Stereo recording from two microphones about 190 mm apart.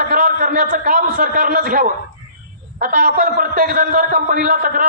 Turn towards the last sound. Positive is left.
turn(degrees=-45)  # may be behind; listen again after turning